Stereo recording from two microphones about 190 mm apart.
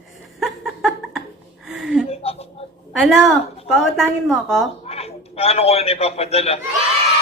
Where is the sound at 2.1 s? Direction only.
30° left (ahead or behind).